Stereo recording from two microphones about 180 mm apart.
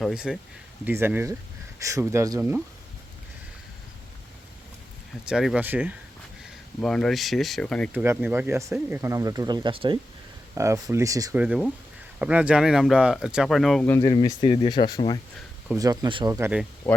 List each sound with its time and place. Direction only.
0.0 s speech: 5° right (ahead or behind)
5.3 s speech: 5° right (ahead or behind)
6.8 s speech: 5° left (ahead or behind)
7.9 s speech: 10° right (ahead or behind); by 10.0 s 30° right (ahead or behind)
10.5 s speech: 15° right (ahead or behind)
11.3 s speech: 5° right (ahead or behind)
13.8 s speech: 15° left (ahead or behind)
14.1 s speech: 25° left (ahead or behind)
15.8 s speech: 20° right (ahead or behind)
16.9 s speech: 10° left (ahead or behind)